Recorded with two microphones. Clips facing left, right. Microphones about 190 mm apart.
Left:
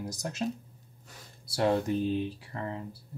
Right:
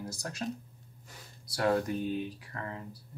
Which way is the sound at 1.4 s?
25° left (ahead or behind).